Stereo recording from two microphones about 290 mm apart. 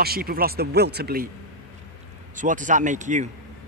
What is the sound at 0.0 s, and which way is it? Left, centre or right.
Speech, right.